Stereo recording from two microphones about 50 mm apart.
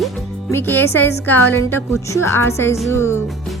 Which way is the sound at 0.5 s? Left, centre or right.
Left.